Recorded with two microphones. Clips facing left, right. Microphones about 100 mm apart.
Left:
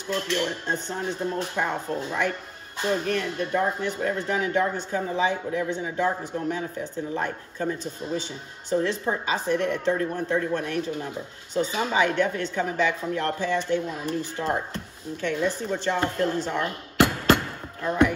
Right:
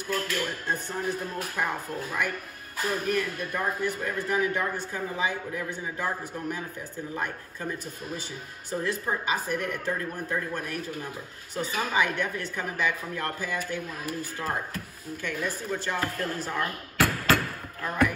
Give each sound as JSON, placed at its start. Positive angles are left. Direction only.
{"t": 0.1, "sound": "a man's voice", "side_deg": 25}
{"t": 15.7, "sound": "music", "side_deg": 25}